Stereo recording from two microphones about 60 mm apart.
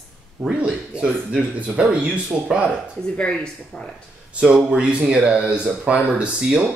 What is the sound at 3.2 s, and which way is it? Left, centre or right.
Speech, centre.